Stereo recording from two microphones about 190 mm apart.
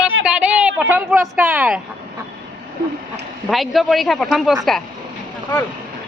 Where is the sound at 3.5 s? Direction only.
Centre (ahead or behind).